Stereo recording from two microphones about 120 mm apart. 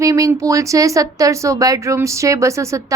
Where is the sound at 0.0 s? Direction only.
30° right (ahead or behind).